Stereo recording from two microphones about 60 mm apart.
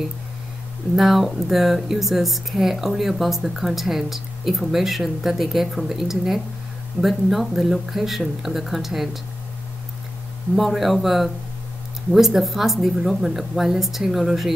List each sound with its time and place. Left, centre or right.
0.9 s speech: centre
10.5 s speech: centre